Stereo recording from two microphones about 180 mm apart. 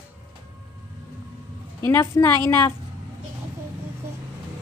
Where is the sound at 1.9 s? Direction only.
15° left (ahead or behind).